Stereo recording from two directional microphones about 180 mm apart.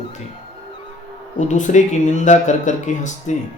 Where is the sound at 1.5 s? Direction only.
40° left (ahead or behind).